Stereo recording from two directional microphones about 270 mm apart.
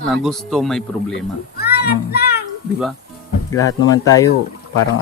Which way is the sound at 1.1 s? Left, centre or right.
Left.